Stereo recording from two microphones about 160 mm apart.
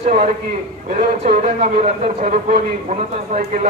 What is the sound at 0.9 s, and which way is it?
A man's voice, 40° right (ahead or behind).